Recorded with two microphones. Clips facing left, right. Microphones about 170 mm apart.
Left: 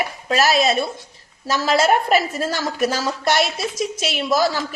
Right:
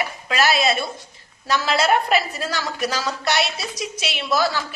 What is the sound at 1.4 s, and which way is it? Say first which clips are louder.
A woman's voice: left 2 dB; 40° left (ahead or behind).